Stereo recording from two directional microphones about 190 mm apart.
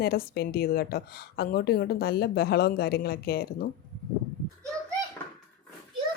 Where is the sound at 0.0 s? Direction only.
55° left (ahead or behind).